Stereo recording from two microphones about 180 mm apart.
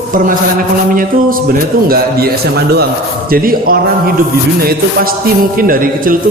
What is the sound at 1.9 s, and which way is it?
A man's voice, 55° right (ahead or behind).